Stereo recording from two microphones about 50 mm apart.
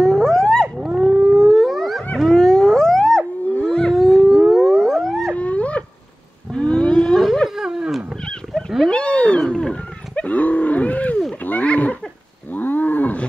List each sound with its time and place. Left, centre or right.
0.0 s whale vocalization: centre
0.7 s wild animals: centre
3.6 s wild animals: centre
3.9 s a sound: centre
5.3 s a sound: left
6.5 s wild animals: centre
7.4 s a sound: centre
8.3 s roaring cats: centre
8.9 s cat: left
9.5 s wild animals: centre
10.1 s wild animals: left
11.4 s a sound: left
12.5 s roaring cats: left